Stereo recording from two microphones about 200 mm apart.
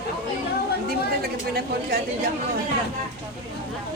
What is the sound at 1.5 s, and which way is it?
Speech, 50° right (ahead or behind).